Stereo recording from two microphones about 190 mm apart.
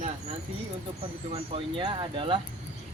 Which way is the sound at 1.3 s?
30° right (ahead or behind).